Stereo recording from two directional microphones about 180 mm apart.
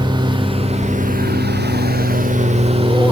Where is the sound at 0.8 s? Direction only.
45° right (ahead or behind).